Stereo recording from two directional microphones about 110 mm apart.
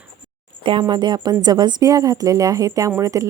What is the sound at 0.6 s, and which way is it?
A woman's voice, 50° right (ahead or behind).